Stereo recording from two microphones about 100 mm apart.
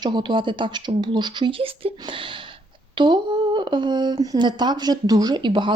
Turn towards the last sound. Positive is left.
turn(degrees=-50)  # may be behind; listen again after turning